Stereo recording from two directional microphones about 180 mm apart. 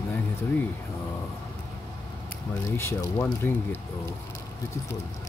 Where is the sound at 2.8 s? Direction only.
15° left (ahead or behind).